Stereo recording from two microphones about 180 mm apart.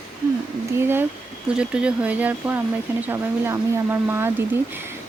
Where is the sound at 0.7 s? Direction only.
10° right (ahead or behind).